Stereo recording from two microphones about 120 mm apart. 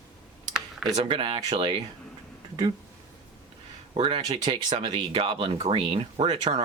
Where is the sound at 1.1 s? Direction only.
45° right (ahead or behind).